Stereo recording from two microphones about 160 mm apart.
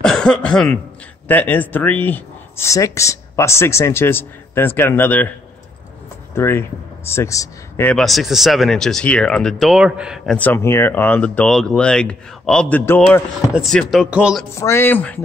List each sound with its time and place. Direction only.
0.0 s cough: 5° left (ahead or behind)
1.2 s speech: 10° left (ahead or behind)
6.3 s speech: 15° left (ahead or behind)
7.9 s speech: centre (ahead or behind)
10.3 s speech: 10° left (ahead or behind)
13.5 s speech: centre (ahead or behind)
14.6 s speech: 15° left (ahead or behind)